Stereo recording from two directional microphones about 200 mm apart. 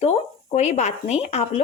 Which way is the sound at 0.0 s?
35° left (ahead or behind).